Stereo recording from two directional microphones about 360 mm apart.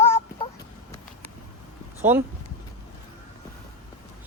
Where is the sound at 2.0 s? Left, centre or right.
Centre.